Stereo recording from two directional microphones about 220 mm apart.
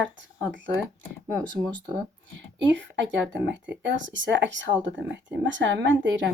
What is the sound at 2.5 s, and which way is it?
Speech, 55° right (ahead or behind).